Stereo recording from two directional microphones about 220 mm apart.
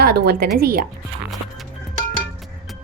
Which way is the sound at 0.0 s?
45° right (ahead or behind).